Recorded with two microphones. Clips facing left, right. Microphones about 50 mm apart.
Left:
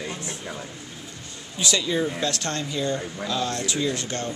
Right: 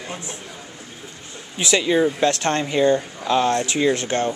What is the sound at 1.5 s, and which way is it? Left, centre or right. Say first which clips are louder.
Speech: right 6 dB; right.